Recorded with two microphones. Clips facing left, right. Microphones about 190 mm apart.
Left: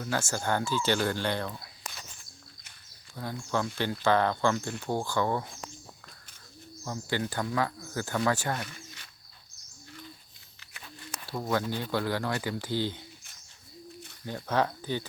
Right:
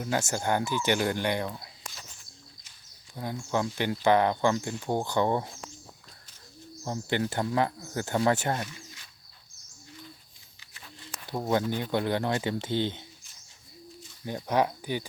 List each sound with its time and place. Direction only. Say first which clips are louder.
0.0 s speech: right 2 dB; 20° right (ahead or behind)
3.2 s speech: right 2 dB; 15° right (ahead or behind)
6.8 s speech: right 3 dB; 25° right (ahead or behind)
11.3 s speech: right 3 dB; 20° right (ahead or behind)
14.3 s speech: right 2 dB; 15° right (ahead or behind)